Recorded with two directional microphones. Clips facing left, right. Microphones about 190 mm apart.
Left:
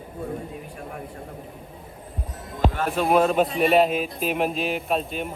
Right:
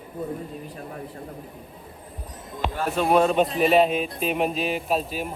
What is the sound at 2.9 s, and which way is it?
A man's voice, centre (ahead or behind).